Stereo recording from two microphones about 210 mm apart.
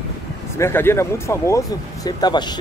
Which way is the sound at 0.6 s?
10° left (ahead or behind).